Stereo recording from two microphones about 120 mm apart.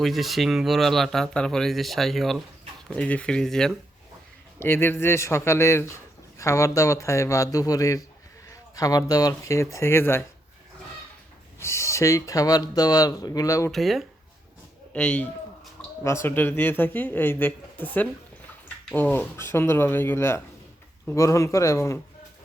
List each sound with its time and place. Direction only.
0.0 s speech: centre (ahead or behind)
4.6 s speech: 20° left (ahead or behind)
11.6 s speech: 25° left (ahead or behind)
13.7 s speech: centre (ahead or behind)
14.9 s speech: 10° left (ahead or behind)